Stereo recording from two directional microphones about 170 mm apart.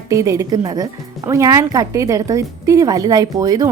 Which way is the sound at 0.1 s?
20° right (ahead or behind).